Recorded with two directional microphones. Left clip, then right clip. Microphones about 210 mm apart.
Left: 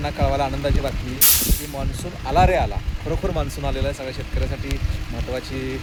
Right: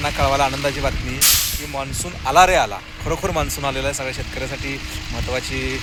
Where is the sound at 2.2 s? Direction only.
5° right (ahead or behind).